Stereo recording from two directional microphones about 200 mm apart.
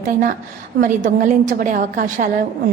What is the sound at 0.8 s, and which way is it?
A woman's voice, 40° right (ahead or behind).